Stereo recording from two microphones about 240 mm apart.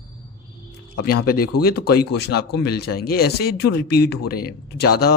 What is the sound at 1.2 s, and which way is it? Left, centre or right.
A man's voice, left.